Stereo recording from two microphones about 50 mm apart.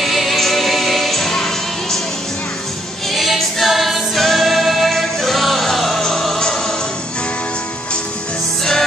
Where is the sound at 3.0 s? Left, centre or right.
Centre.